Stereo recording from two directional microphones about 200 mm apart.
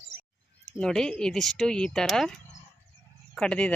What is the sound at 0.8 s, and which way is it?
Speech, 5° left (ahead or behind).